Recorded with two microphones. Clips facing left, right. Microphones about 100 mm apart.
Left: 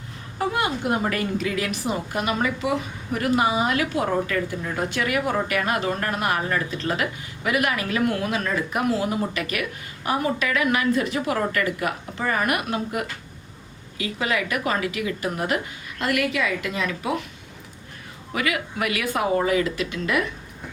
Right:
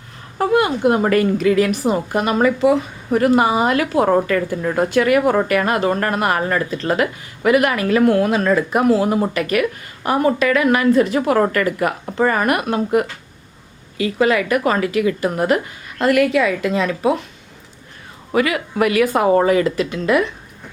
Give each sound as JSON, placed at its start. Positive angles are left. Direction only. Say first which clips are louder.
{"t": 0.3, "sound": "a woman's voice", "louder": "right 8 dB", "side_deg": -60}
{"t": 1.4, "sound": "speech", "louder": "right 10 dB", "side_deg": -45}
{"t": 18.3, "sound": "speech", "louder": "right 8 dB", "side_deg": -35}